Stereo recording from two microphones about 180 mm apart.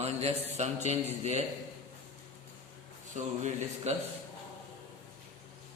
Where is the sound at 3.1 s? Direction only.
40° right (ahead or behind).